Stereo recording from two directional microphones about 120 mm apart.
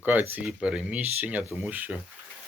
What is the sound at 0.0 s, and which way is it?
Speech, 15° right (ahead or behind).